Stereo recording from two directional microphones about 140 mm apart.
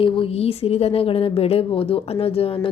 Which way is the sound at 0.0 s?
40° left (ahead or behind).